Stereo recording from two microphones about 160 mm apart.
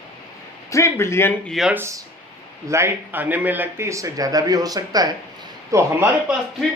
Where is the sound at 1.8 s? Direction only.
20° right (ahead or behind).